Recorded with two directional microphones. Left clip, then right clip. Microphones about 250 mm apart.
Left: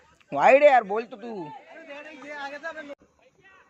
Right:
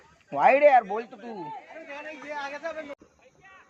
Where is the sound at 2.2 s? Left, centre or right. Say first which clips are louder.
Right 1 dB; centre.